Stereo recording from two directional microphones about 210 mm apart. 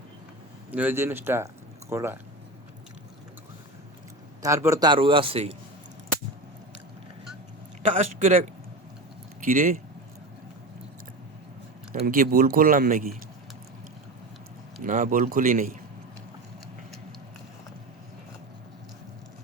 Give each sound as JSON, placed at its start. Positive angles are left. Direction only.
{"t": 0.7, "sound": "speech", "side_deg": -10}
{"t": 4.4, "sound": "a man's voice", "side_deg": -15}
{"t": 7.8, "sound": "a man's voice", "side_deg": -35}
{"t": 9.4, "sound": "speech", "side_deg": -40}
{"t": 12.0, "sound": "speech", "side_deg": -45}
{"t": 14.8, "sound": "speech", "side_deg": -40}